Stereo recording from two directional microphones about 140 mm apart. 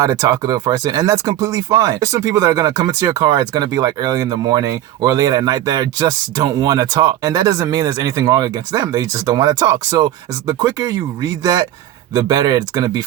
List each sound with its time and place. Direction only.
0.0 s speech: 25° right (ahead or behind)